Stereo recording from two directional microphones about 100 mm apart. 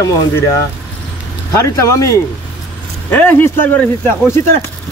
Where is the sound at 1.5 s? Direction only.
30° left (ahead or behind).